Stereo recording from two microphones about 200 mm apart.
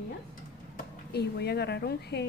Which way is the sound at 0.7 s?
55° left (ahead or behind).